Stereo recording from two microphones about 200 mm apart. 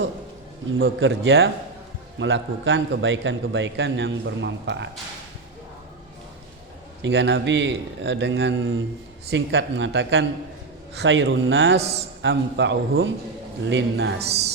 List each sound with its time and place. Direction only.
0.8 s a man's voice: 75° right (ahead or behind)
7.0 s a man's voice: 60° right (ahead or behind)
9.3 s a man's voice: 60° right (ahead or behind)
11.8 s a man's voice: 30° right (ahead or behind)
12.2 s a man's voice: 65° right (ahead or behind)